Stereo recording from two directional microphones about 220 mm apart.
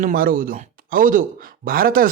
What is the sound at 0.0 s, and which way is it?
Speech, 40° right (ahead or behind).